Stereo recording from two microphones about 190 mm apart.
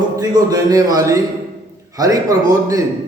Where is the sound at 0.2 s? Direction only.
20° right (ahead or behind).